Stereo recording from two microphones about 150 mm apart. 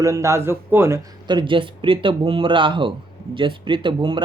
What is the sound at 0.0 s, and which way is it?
Speech, 20° right (ahead or behind).